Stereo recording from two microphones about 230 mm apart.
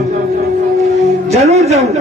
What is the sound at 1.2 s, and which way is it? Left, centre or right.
Speech, right.